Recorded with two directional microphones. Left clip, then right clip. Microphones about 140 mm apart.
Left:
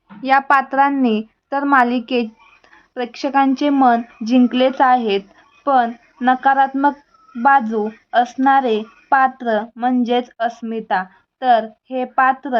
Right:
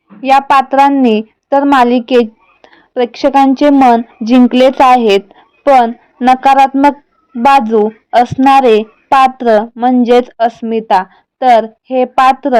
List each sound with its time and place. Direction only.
0.2 s a woman's voice: 25° right (ahead or behind)